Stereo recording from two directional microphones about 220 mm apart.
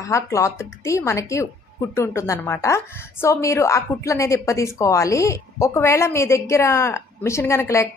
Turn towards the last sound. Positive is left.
turn(degrees=10)  # may be behind; listen again after turning